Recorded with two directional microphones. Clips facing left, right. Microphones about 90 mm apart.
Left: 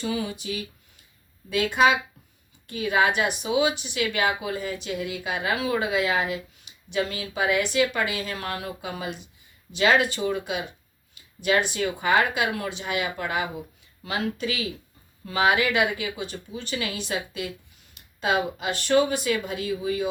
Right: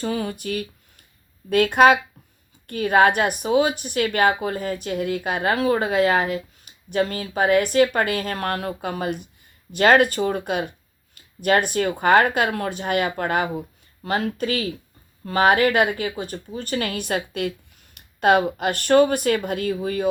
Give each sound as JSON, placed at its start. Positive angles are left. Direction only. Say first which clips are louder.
{"t": 0.0, "sound": "speech", "louder": "right 3 dB", "side_deg": -50}